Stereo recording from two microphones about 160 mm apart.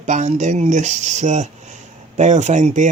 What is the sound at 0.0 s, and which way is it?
Speech, 50° right (ahead or behind).